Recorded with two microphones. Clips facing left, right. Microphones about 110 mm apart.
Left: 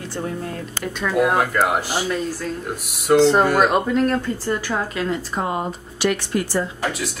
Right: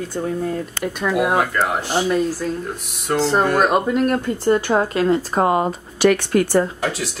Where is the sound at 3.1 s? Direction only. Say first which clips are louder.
Left 3 dB; centre (ahead or behind); by 5.1 s 30° right (ahead or behind).